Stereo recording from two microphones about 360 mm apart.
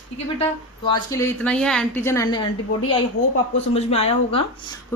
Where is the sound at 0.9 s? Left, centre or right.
Centre.